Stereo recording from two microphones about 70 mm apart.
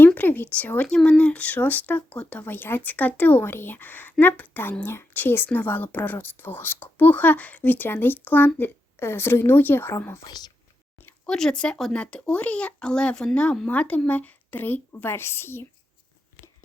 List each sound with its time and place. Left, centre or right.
0.0 s a sound: left
0.9 s speech: centre
2.4 s a woman's voice: left
10.2 s speech: left
11.3 s a woman's voice: centre; by 15.6 s left